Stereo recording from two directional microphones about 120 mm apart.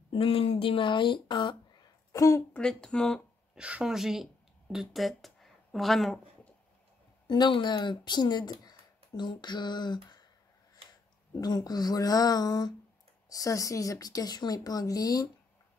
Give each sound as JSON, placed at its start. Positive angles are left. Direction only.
{"t": 0.1, "sound": "speech", "side_deg": 50}
{"t": 2.1, "sound": "a woman's voice", "side_deg": 25}
{"t": 2.5, "sound": "speech", "side_deg": 5}
{"t": 3.5, "sound": "a woman's voice", "side_deg": -10}
{"t": 7.2, "sound": "speech", "side_deg": 40}
{"t": 11.4, "sound": "speech", "side_deg": 35}